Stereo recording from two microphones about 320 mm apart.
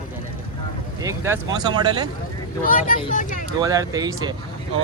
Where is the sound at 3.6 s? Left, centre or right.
Centre.